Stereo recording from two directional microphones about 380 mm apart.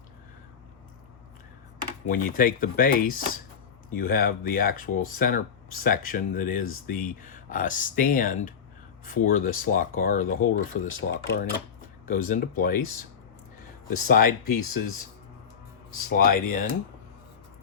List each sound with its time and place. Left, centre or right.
2.0 s speech: left
14.1 s speech: left
14.4 s speech: left
15.9 s speech: left